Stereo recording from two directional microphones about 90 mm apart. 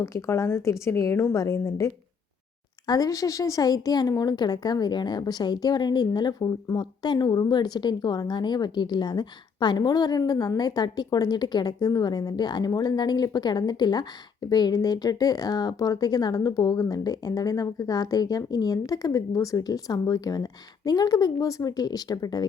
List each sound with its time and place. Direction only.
0.0 s a woman's voice: 35° left (ahead or behind)